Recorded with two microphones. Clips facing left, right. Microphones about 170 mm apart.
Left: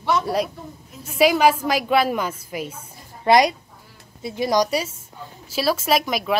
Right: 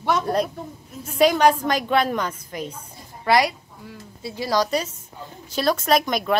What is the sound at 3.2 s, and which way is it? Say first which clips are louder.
A woman's voice: left 3 dB; 20° left (ahead or behind).